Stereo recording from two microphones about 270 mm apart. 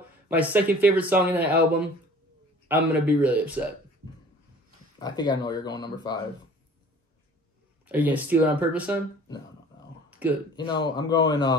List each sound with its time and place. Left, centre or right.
0.3 s speech: centre
2.7 s speech: centre
4.9 s speech: centre
7.8 s speech: centre
10.0 s a sound: centre
10.8 s speech: centre